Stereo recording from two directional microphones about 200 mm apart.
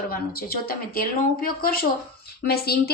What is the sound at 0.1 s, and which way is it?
A woman's voice, 50° left (ahead or behind).